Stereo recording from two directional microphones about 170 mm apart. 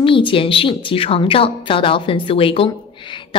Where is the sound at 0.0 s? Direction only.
30° left (ahead or behind).